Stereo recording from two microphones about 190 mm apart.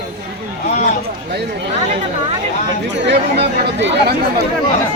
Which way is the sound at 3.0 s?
65° right (ahead or behind).